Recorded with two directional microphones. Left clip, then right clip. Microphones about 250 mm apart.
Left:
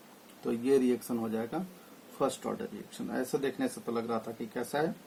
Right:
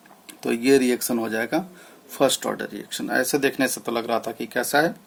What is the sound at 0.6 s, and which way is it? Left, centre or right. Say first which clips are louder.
Speech: right 9 dB; right.